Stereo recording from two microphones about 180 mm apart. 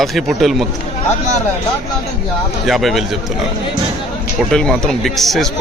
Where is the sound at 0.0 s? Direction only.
Centre (ahead or behind).